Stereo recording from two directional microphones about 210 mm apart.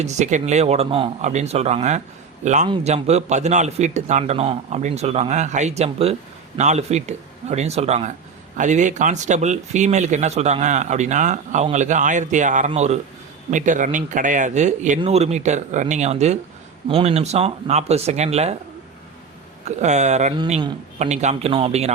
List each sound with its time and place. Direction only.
0.0 s a man's voice: 35° right (ahead or behind)
19.6 s speech: 35° right (ahead or behind)